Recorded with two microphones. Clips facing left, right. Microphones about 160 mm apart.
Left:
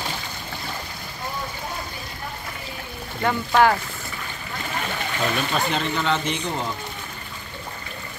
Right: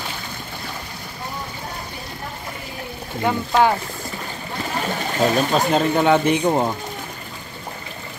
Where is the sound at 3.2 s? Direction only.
15° right (ahead or behind).